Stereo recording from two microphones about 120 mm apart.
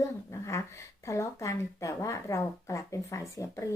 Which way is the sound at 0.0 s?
25° left (ahead or behind).